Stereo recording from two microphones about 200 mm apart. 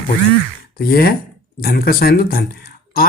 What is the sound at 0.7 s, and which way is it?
Speech, 50° left (ahead or behind).